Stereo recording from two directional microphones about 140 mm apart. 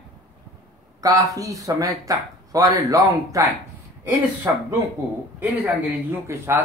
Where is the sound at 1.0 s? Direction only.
25° right (ahead or behind).